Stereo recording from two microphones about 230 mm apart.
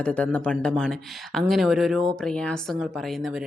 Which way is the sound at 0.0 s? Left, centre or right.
Centre.